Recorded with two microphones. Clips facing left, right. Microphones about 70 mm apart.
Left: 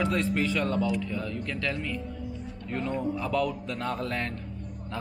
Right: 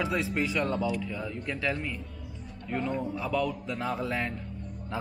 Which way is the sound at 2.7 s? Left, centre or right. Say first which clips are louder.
Left 1 dB; centre.